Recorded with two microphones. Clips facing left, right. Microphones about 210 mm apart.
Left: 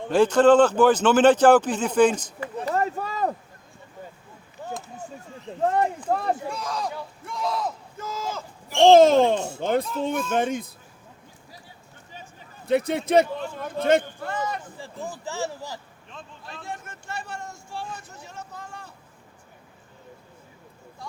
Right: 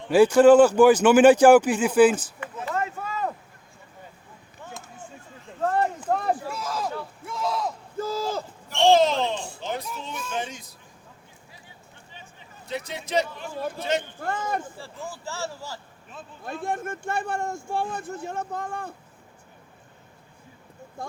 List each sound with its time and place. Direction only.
0.1 s speech: 10° right (ahead or behind)
2.6 s a sound: 35° left (ahead or behind)
4.6 s a sound: 35° left (ahead or behind)
5.6 s speech: 20° left (ahead or behind)
6.1 s speech: centre (ahead or behind)
7.3 s a sound: centre (ahead or behind)
7.9 s speech: 35° right (ahead or behind)
8.8 s a child's voice: 50° left (ahead or behind)
12.6 s speech: 55° left (ahead or behind)
14.2 s speech: 50° right (ahead or behind)
14.8 s speech: 15° left (ahead or behind)
16.1 s speech: 5° right (ahead or behind)
16.6 s speech: 55° right (ahead or behind)
21.0 s a sound: 50° right (ahead or behind)